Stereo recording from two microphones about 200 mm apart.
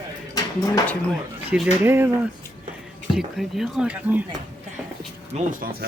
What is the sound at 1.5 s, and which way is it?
Speech, 10° right (ahead or behind).